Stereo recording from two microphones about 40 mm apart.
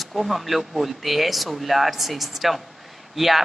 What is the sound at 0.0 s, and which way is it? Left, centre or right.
Speech, centre.